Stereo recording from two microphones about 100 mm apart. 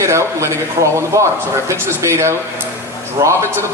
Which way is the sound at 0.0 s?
30° right (ahead or behind).